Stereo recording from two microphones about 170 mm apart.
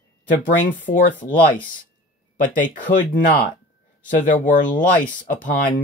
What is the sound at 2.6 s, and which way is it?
Speech, 50° left (ahead or behind).